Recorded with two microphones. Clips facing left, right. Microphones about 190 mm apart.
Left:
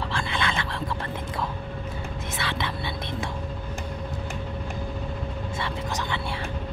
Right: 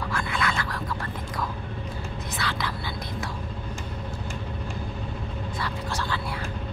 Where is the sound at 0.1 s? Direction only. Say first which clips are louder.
Right 1 dB; 25° left (ahead or behind).